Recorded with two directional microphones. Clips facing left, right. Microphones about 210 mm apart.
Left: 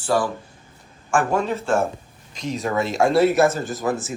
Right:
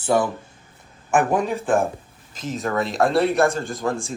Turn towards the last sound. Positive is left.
turn(degrees=5)  # may be behind; listen again after turning